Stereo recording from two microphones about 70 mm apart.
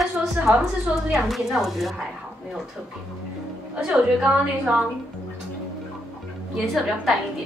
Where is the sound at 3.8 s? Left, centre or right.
Centre.